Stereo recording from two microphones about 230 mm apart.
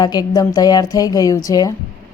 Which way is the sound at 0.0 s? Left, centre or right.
Centre.